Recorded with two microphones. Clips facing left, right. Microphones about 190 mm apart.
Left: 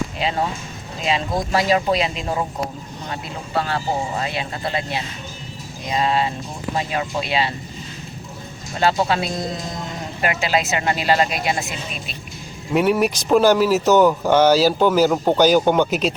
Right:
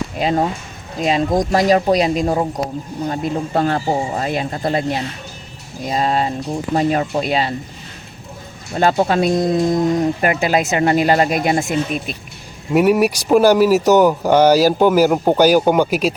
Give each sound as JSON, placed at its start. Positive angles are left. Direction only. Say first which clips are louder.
{"t": 0.2, "sound": "speech", "louder": "right 8 dB", "side_deg": -45}
{"t": 8.8, "sound": "speech", "louder": "right 4 dB", "side_deg": -50}
{"t": 12.7, "sound": "speech", "louder": "right 4 dB", "side_deg": -10}